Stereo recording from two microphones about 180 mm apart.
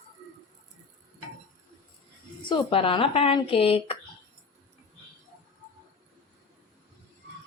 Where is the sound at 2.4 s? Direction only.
30° left (ahead or behind).